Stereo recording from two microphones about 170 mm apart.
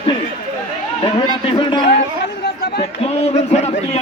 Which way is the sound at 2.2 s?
80° left.